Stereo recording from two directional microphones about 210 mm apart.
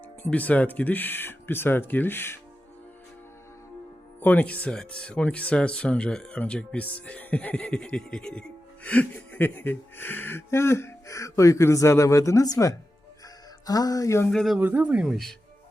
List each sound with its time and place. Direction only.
0.2 s speech: 5° left (ahead or behind)
4.2 s speech: 5° left (ahead or behind)
13.2 s music: 15° left (ahead or behind)
14.3 s speech: centre (ahead or behind)